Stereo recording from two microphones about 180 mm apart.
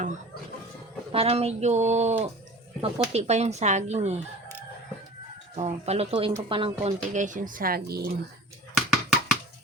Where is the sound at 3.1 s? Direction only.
35° right (ahead or behind).